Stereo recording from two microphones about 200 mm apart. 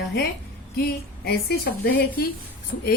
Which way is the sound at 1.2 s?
50° left (ahead or behind).